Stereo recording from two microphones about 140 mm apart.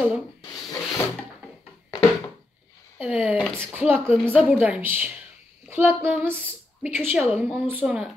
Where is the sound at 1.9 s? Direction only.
25° left (ahead or behind).